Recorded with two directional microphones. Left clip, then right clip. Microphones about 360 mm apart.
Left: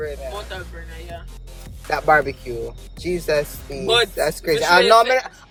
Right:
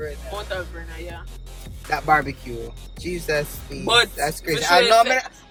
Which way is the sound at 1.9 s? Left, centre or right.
Centre.